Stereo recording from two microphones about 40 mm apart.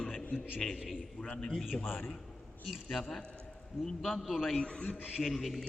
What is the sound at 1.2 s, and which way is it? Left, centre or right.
Speech, left.